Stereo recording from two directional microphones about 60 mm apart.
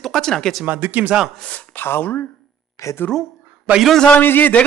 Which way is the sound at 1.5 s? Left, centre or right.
Left.